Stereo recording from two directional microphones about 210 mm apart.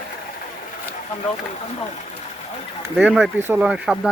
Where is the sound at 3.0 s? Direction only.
5° right (ahead or behind).